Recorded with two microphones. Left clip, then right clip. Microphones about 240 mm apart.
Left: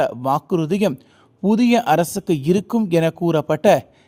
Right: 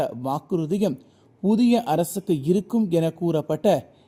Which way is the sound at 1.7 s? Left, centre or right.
Left.